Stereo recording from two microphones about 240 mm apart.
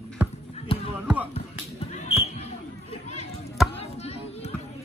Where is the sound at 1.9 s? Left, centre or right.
Left.